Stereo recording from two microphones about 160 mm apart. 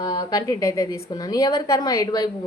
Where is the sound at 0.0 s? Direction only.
25° left (ahead or behind).